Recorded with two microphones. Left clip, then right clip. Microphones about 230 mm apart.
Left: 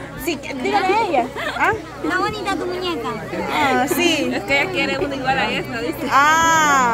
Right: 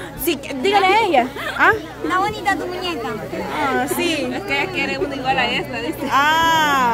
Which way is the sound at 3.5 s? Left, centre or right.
Centre.